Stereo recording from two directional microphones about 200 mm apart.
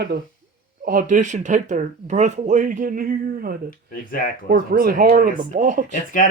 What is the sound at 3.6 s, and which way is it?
Speech, 45° left (ahead or behind).